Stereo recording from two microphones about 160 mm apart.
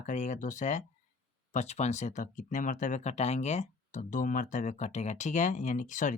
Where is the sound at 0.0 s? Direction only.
50° left (ahead or behind).